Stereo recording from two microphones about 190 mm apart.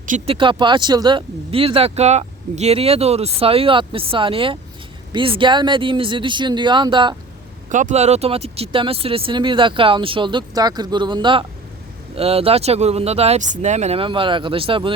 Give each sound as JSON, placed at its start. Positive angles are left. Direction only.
{"t": 0.3, "sound": "speech", "side_deg": -25}
{"t": 7.7, "sound": "speech", "side_deg": -40}